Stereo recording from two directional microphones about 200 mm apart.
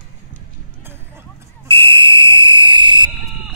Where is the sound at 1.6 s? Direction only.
25° right (ahead or behind).